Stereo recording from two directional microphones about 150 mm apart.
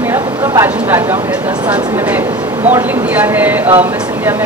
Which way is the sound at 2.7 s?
15° right (ahead or behind).